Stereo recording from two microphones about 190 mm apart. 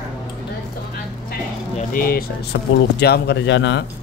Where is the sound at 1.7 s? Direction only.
50° left (ahead or behind); by 3.8 s 70° left (ahead or behind).